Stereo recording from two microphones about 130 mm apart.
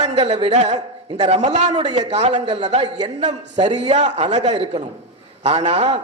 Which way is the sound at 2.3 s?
35° right (ahead or behind).